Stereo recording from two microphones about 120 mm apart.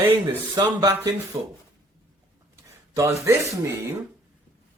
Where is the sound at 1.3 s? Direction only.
60° right (ahead or behind).